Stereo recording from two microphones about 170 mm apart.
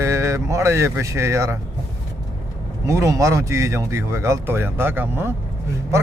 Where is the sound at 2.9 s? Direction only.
20° right (ahead or behind).